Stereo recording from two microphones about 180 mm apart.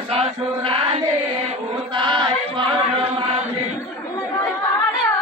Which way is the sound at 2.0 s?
25° right (ahead or behind).